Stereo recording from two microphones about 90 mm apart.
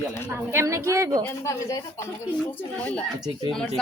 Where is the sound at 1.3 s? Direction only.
35° left (ahead or behind).